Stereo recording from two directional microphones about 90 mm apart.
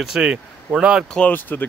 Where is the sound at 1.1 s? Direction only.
15° left (ahead or behind).